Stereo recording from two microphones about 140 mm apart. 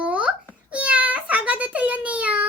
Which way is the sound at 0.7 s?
10° right (ahead or behind).